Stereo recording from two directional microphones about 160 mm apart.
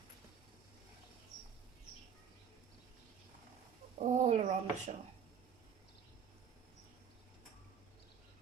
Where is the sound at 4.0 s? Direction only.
45° right (ahead or behind).